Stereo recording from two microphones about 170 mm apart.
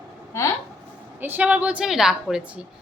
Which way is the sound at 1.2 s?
10° right (ahead or behind).